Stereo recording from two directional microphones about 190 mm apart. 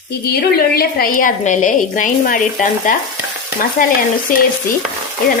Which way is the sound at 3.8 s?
45° left (ahead or behind).